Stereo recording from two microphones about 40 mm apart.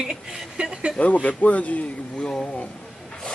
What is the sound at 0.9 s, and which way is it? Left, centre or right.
Speech, left.